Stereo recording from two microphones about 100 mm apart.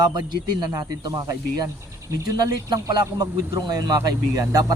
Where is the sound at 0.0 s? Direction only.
45° right (ahead or behind).